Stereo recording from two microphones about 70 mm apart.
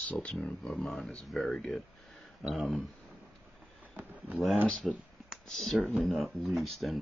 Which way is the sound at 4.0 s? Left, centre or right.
Right.